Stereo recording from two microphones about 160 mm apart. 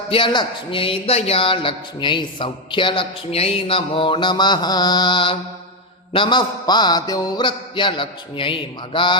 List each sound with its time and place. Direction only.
0.1 s a man's voice: 30° left (ahead or behind)
6.1 s mantra: 30° left (ahead or behind)